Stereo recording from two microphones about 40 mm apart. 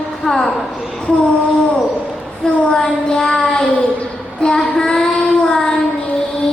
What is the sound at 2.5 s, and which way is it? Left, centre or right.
Child singing, left.